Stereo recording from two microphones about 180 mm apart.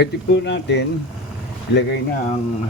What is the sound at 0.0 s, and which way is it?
Speech, 80° left.